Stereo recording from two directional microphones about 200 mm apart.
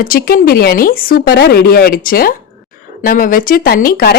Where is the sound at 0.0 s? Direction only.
45° left (ahead or behind).